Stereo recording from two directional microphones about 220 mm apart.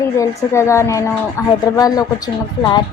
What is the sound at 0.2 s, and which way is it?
Speech, 10° left (ahead or behind).